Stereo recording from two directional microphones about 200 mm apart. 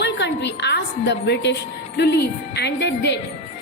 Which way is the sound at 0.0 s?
60° left (ahead or behind).